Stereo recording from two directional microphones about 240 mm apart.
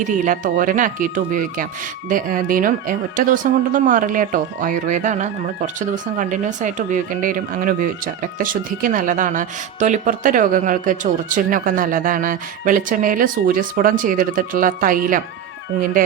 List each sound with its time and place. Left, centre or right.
0.0 s speech: right